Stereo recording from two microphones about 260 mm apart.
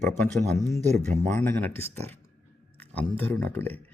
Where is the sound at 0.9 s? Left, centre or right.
Right.